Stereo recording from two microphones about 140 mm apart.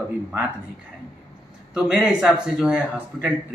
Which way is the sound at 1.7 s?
5° right (ahead or behind).